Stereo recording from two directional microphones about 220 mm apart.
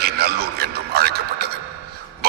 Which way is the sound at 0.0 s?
45° right (ahead or behind).